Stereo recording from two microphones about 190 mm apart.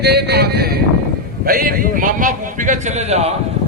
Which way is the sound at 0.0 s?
60° right (ahead or behind).